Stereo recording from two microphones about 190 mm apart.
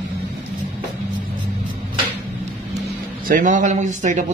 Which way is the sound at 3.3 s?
45° right (ahead or behind).